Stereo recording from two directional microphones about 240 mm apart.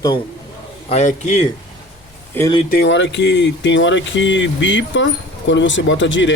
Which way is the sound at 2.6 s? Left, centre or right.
Left.